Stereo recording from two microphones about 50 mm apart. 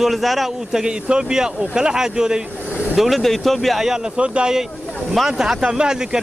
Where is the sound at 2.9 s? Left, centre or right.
Centre.